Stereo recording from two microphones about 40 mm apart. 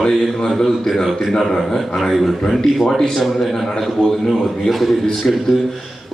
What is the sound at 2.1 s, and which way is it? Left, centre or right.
Speech, centre.